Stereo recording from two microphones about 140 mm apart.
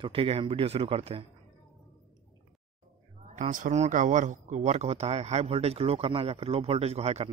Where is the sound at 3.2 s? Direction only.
65° right (ahead or behind).